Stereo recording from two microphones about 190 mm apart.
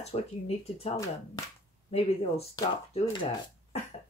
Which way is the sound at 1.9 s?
30° left (ahead or behind).